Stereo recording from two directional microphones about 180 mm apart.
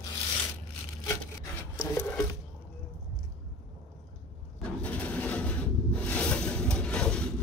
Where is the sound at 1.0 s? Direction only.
15° left (ahead or behind).